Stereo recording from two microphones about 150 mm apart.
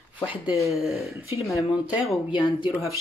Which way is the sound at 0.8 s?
Centre (ahead or behind).